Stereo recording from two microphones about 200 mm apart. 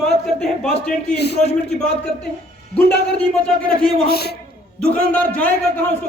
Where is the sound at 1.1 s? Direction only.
55° left (ahead or behind).